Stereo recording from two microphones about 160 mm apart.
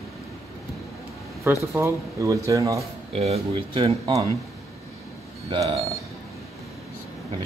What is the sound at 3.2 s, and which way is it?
Speech, 40° right (ahead or behind).